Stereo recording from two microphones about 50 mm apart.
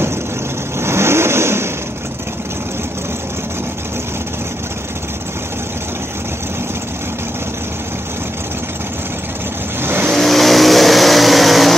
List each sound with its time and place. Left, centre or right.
0.7 s vehicle: right
9.8 s vehicle: right
10.1 s vehicle: centre